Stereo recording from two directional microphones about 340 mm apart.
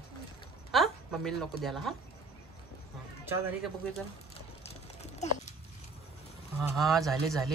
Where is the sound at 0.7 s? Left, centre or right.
Centre.